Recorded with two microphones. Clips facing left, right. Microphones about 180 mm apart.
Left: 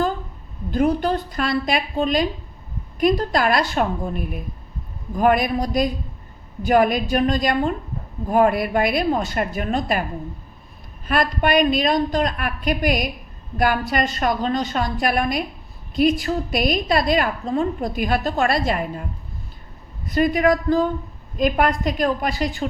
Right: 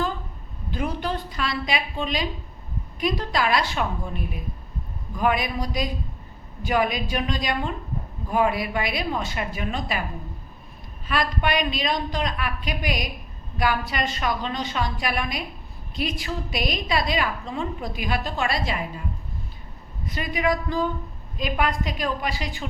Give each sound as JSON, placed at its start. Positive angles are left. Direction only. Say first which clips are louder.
{"t": 0.7, "sound": "a woman's voice", "louder": "left 8 dB", "side_deg": 45}
{"t": 11.1, "sound": "a woman's voice", "louder": "left 5 dB", "side_deg": 50}
{"t": 20.1, "sound": "a woman's voice", "louder": "left 7 dB", "side_deg": 45}